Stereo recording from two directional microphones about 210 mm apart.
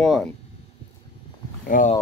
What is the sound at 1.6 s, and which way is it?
Speech, 40° left (ahead or behind).